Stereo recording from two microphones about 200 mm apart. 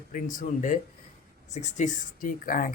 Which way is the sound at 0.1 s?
40° left (ahead or behind).